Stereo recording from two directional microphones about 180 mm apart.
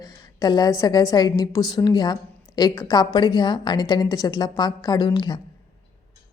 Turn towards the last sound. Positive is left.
turn(degrees=25)  # may be behind; listen again after turning